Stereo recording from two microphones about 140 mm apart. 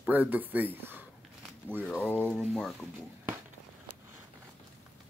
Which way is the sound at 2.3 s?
Centre (ahead or behind).